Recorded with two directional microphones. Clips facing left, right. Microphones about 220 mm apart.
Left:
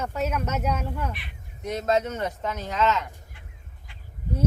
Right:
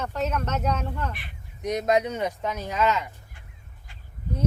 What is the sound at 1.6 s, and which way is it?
Speech, 15° right (ahead or behind).